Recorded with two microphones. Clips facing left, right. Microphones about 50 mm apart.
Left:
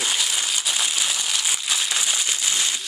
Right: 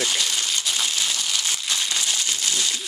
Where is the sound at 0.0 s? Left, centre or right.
Centre.